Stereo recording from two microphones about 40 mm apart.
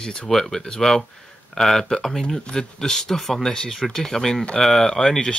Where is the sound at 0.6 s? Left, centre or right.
Centre.